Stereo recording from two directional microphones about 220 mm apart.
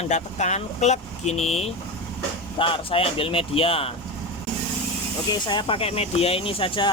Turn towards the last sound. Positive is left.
turn(degrees=25)  # may be behind; listen again after turning